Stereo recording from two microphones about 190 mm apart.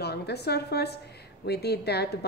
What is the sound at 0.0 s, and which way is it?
A woman's voice, 60° left (ahead or behind).